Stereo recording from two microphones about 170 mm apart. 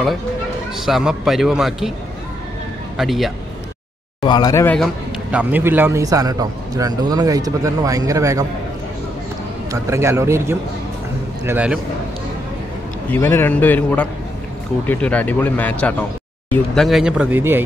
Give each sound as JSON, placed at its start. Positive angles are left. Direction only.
{"t": 0.7, "sound": "a man's voice", "side_deg": 0}
{"t": 3.0, "sound": "a man's voice", "side_deg": 0}
{"t": 4.2, "sound": "speech", "side_deg": 25}
{"t": 5.3, "sound": "a man's voice", "side_deg": -10}
{"t": 9.7, "sound": "a man's voice", "side_deg": -15}
{"t": 13.1, "sound": "speech", "side_deg": 15}